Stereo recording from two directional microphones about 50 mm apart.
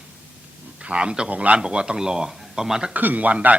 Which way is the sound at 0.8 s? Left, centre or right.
Right.